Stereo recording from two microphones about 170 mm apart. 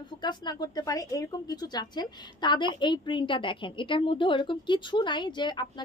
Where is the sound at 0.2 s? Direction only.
25° left (ahead or behind).